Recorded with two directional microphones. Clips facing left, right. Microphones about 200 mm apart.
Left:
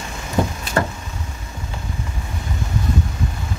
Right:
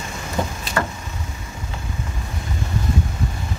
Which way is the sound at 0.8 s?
30° left (ahead or behind).